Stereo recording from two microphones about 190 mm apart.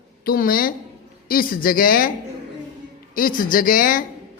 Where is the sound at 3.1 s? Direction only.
45° left (ahead or behind).